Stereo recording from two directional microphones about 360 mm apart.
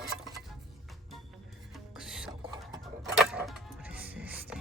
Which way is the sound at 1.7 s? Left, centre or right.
Centre.